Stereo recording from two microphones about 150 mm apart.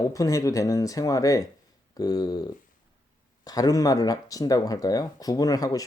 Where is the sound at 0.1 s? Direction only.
20° left (ahead or behind).